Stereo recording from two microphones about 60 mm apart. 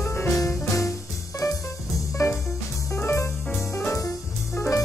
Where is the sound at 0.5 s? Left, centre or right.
Left.